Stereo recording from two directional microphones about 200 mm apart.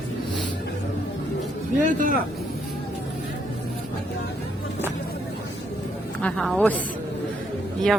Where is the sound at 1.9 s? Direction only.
40° right (ahead or behind).